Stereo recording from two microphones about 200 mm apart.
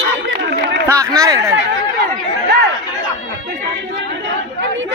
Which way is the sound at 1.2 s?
15° right (ahead or behind).